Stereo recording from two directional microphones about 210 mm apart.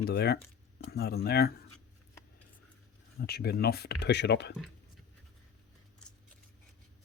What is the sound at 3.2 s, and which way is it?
Speech, 50° left (ahead or behind).